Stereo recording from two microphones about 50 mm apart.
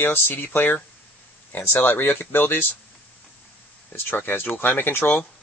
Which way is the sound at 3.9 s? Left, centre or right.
Left.